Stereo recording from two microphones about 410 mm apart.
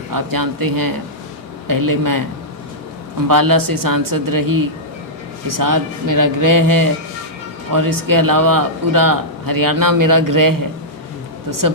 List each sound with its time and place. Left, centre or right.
0.1 s a man's voice: right
3.2 s a man's voice: right